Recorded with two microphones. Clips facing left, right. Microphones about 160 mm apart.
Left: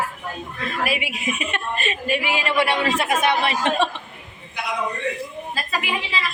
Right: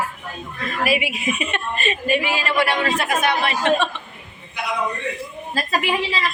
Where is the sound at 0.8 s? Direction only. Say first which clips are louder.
Right 5 dB; 5° right (ahead or behind).